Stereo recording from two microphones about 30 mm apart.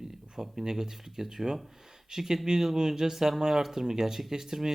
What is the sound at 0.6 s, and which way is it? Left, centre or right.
Speech, centre.